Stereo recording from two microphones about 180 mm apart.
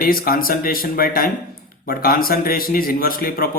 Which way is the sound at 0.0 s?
55° left (ahead or behind).